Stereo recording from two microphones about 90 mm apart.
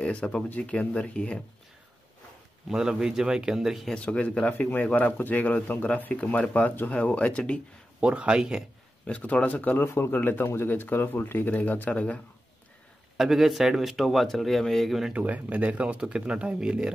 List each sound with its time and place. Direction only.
0.0 s a man's voice: 10° left (ahead or behind)
2.7 s speech: 5° right (ahead or behind)
3.9 s a man's voice: 10° left (ahead or behind)
8.0 s speech: 15° right (ahead or behind)
9.0 s speech: 15° left (ahead or behind)
13.2 s speech: 5° right (ahead or behind)
15.1 s speech: 15° right (ahead or behind)